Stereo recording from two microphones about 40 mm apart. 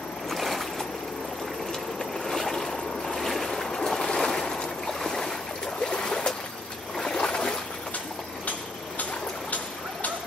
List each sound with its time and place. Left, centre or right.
0.3 s boat: centre
2.2 s boat: centre
5.9 s boat: centre
7.0 s a sound: centre